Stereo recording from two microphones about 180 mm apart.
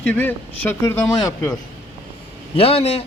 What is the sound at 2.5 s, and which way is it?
Speech, 35° left (ahead or behind).